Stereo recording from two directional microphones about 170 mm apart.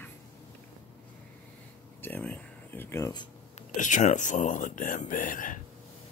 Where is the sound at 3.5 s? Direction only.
45° left (ahead or behind).